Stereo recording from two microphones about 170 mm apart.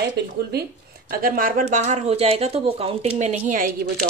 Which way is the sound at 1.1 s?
60° right (ahead or behind).